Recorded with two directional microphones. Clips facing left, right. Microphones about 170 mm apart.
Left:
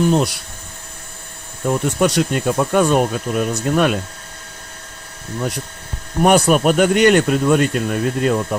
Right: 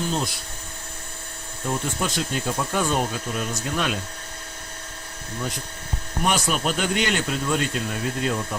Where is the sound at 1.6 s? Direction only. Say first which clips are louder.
Left 10 dB; 65° left (ahead or behind).